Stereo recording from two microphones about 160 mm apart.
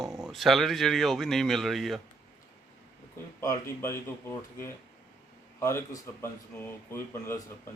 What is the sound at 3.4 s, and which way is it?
Speech, 20° left (ahead or behind).